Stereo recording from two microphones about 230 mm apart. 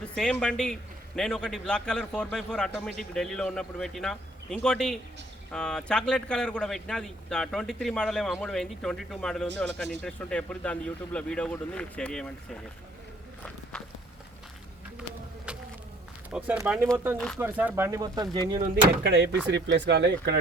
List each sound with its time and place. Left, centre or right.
0.0 s speech: centre
16.3 s speech: centre
17.2 s speech: centre
17.4 s speech: centre
19.0 s speech: right